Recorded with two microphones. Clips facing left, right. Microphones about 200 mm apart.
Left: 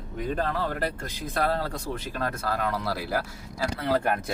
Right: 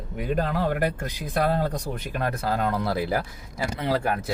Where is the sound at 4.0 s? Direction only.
Centre (ahead or behind).